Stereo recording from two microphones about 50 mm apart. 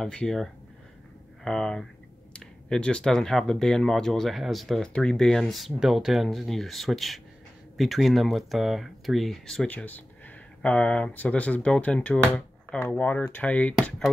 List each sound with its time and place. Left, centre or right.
0.0 s speech: centre
2.3 s speech: centre
4.8 s speech: centre
9.8 s a sound: left
11.1 s speech: left
13.4 s speech: left